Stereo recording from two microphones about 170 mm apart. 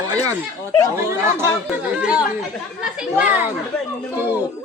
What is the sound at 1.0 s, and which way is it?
A man's voice, 15° right (ahead or behind).